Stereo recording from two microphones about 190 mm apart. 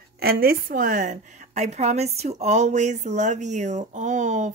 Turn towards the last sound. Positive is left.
turn(degrees=-40)  # may be behind; listen again after turning